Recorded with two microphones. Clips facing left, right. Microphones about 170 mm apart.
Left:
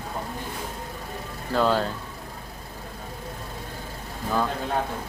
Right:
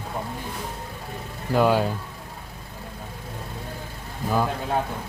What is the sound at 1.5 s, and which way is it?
Speech, 15° right (ahead or behind).